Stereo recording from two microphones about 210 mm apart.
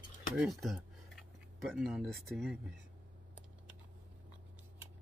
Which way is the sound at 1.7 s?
Centre (ahead or behind).